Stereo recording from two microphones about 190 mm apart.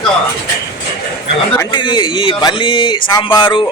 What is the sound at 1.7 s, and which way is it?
A man's voice, 25° left (ahead or behind).